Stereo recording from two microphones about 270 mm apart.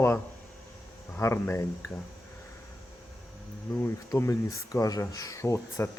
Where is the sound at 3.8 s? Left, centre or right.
Centre.